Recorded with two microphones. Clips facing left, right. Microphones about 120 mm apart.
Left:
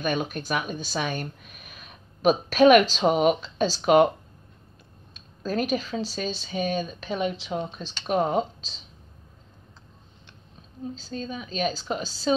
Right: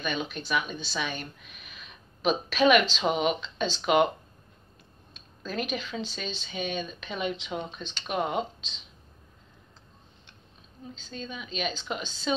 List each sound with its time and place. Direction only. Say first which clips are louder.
0.0 s a woman's voice: left 5 dB; 45° left (ahead or behind)
5.4 s speech: left 6 dB; 40° left (ahead or behind)
11.0 s speech: left 2 dB; 35° left (ahead or behind)